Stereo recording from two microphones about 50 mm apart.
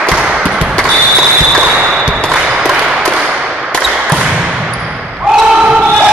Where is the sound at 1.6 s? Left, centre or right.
Centre.